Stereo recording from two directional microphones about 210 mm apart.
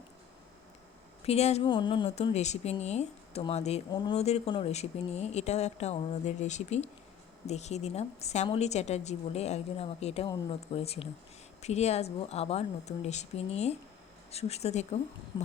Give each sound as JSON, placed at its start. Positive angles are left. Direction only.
{"t": 1.2, "sound": "speech", "side_deg": 30}
{"t": 3.9, "sound": "speech", "side_deg": 20}